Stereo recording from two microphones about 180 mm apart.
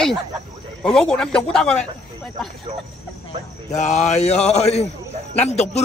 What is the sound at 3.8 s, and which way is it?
Speech, 40° left (ahead or behind).